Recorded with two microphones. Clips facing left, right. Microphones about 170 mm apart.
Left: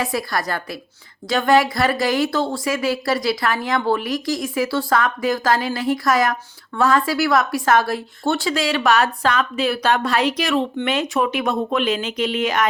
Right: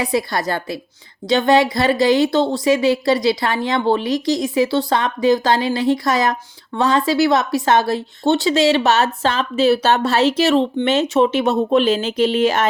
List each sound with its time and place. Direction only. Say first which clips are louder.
0.0 s speech: right 3 dB; 25° right (ahead or behind)